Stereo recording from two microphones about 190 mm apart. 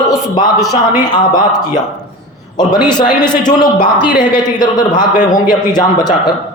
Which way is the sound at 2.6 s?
25° left (ahead or behind).